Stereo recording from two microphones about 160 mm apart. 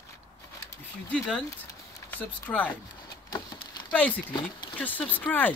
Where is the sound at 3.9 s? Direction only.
10° left (ahead or behind).